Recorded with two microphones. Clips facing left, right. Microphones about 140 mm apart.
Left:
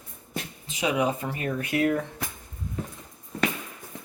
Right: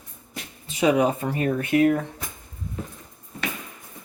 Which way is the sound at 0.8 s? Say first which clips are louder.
Right 5 dB; 45° right (ahead or behind).